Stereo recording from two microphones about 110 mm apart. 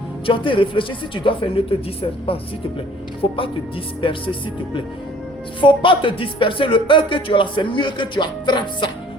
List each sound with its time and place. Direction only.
0.3 s a woman's voice: 50° left (ahead or behind)